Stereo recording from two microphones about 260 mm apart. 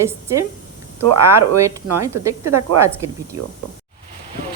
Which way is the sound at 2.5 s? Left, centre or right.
Right.